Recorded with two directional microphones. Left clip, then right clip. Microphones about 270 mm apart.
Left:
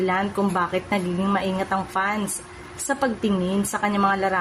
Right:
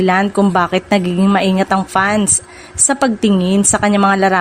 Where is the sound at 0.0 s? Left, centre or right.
Right.